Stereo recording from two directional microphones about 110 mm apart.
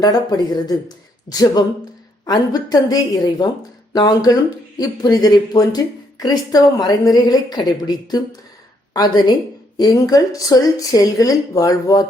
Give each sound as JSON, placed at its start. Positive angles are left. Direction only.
{"t": 0.0, "sound": "a woman's voice", "side_deg": 35}